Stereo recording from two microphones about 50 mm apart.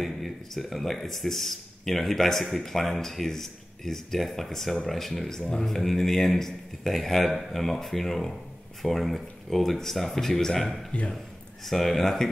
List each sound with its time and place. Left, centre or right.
0.0 s speech: centre
5.4 s speech: centre
10.9 s speech: left
11.6 s speech: centre